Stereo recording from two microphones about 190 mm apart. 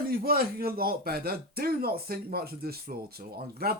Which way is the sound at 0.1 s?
50° right (ahead or behind).